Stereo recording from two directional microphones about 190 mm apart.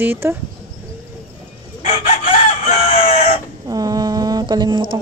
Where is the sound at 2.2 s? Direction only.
30° left (ahead or behind).